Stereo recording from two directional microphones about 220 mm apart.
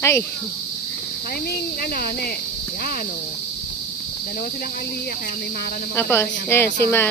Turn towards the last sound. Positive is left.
turn(degrees=10)  # may be behind; listen again after turning